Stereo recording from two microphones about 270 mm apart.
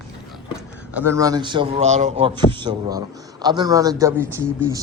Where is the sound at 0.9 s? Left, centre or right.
Centre.